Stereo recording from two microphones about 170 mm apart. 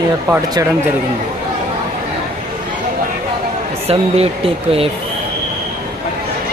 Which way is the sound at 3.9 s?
35° right (ahead or behind).